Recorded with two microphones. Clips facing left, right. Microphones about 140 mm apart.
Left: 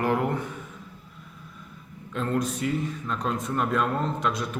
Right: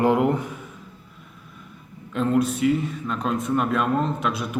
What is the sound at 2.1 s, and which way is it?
Speech, centre (ahead or behind).